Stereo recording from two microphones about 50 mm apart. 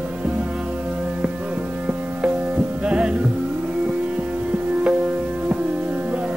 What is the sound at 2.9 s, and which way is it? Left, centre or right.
Music, right.